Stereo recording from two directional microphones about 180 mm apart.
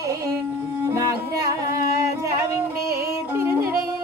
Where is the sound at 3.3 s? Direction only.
15° right (ahead or behind).